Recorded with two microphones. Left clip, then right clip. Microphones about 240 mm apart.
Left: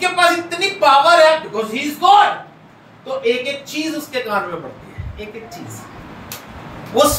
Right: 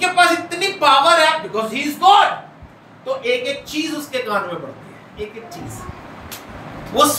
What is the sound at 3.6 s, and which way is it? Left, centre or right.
Speech, centre.